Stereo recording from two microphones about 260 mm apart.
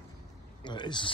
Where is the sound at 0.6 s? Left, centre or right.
Centre.